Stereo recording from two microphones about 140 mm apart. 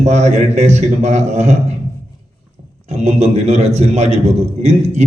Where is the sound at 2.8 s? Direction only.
50° right (ahead or behind).